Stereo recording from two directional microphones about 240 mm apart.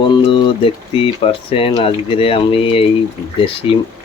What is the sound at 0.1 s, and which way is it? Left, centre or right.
Speech, left.